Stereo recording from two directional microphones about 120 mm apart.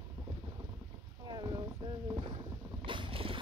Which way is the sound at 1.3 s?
35° right (ahead or behind).